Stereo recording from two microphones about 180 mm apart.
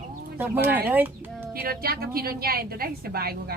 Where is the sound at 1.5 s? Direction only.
60° right (ahead or behind).